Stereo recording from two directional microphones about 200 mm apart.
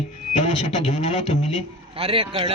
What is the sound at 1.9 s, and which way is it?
Speech, 30° right (ahead or behind).